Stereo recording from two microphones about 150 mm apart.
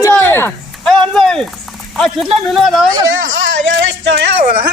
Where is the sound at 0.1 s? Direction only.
15° left (ahead or behind).